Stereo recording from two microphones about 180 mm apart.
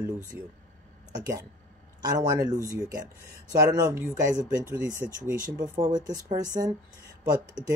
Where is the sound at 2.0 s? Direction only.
20° right (ahead or behind); by 5.7 s 5° right (ahead or behind).